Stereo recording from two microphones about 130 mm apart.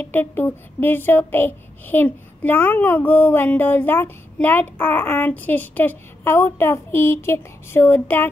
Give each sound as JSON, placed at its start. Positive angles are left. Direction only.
{"t": 0.0, "sound": "speech", "side_deg": 15}